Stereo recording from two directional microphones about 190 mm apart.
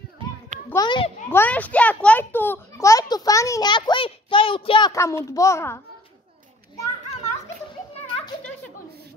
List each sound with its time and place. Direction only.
0.7 s a child's voice: 20° left (ahead or behind)
1.3 s a child's voice: 10° left (ahead or behind)